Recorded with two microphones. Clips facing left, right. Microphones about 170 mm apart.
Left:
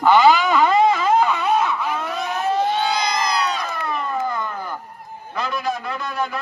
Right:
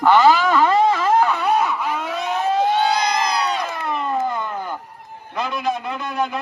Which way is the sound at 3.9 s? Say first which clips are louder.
Right 3 dB; 25° right (ahead or behind).